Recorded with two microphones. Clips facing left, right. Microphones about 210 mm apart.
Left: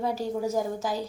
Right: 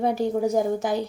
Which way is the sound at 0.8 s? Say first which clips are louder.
Right 5 dB; 65° right (ahead or behind).